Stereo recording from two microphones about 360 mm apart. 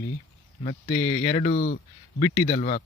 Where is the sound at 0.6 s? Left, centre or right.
Centre.